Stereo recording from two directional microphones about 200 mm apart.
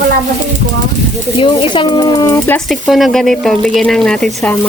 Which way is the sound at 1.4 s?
25° left (ahead or behind).